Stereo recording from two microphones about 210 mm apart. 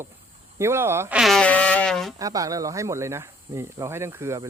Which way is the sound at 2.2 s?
15° right (ahead or behind).